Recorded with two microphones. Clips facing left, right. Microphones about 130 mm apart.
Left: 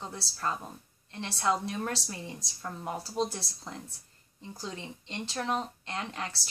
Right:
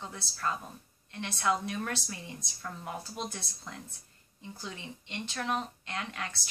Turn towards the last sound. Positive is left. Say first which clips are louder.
# left 2 dB
turn(degrees=30)  # may be behind; listen again after turning